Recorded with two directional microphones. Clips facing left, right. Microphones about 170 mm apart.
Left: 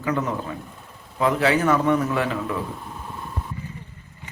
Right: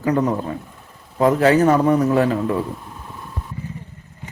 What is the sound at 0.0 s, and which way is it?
A man's voice, 35° right (ahead or behind).